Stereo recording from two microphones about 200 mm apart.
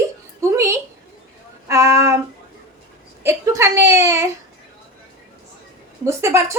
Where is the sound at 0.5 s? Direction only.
15° right (ahead or behind).